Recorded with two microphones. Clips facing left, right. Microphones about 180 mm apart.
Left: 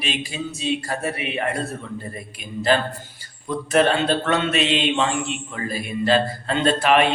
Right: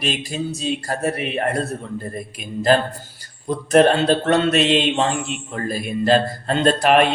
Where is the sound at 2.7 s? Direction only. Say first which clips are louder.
Right 3 dB; 40° right (ahead or behind).